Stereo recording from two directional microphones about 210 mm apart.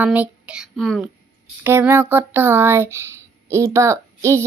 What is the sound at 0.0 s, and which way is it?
A child's voice, 5° right (ahead or behind).